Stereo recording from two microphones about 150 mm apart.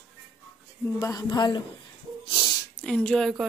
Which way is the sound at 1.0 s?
25° left (ahead or behind).